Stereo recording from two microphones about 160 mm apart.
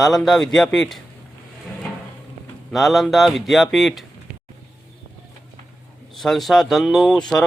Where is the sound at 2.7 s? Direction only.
Centre (ahead or behind).